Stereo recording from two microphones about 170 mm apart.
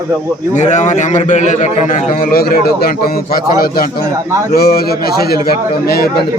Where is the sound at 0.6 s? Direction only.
45° left (ahead or behind); by 6.2 s 65° left (ahead or behind).